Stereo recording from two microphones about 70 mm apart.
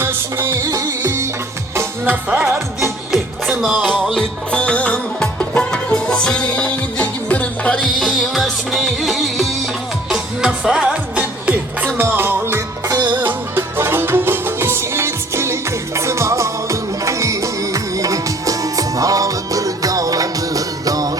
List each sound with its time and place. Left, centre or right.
0.0 s music: right
0.5 s music: right
2.0 s music: right
2.5 s music: centre
4.5 s music: centre
7.9 s music: centre
11.9 s music: right